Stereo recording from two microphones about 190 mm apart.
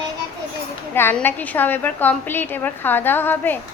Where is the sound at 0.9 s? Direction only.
10° left (ahead or behind).